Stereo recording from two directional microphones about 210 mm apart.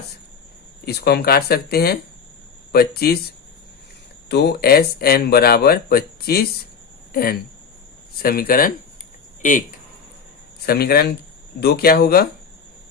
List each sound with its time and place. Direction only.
0.9 s speech: 50° left (ahead or behind)
4.3 s speech: 50° left (ahead or behind)
10.7 s speech: 50° left (ahead or behind)